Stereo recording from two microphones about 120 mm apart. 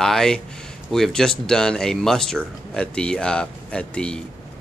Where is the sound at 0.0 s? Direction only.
5° left (ahead or behind).